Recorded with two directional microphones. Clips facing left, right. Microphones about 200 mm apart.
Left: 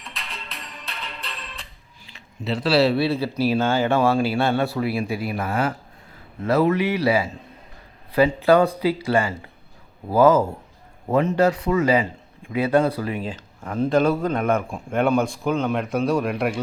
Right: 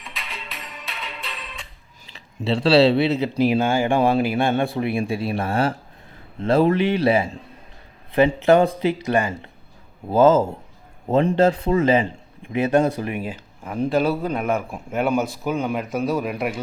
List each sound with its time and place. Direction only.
0.0 s music: centre (ahead or behind)
2.1 s speech: 30° right (ahead or behind)
8.4 s speech: 25° right (ahead or behind); by 16.6 s centre (ahead or behind)